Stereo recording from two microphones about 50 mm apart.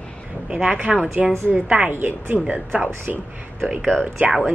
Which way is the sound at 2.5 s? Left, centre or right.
Right.